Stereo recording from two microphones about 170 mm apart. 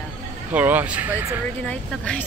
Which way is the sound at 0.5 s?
10° right (ahead or behind).